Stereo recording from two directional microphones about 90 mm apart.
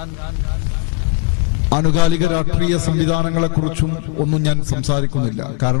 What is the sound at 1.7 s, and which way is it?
A man's voice, 10° right (ahead or behind).